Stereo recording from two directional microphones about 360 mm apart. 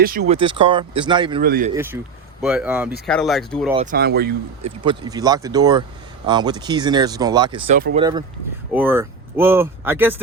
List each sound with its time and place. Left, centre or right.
0.0 s speech: right
1.4 s speech: right
1.7 s speech: centre
3.8 s speech: right
4.8 s speech: centre
7.8 s speech: right
8.7 s speech: centre